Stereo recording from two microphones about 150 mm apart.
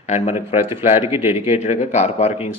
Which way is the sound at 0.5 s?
15° right (ahead or behind).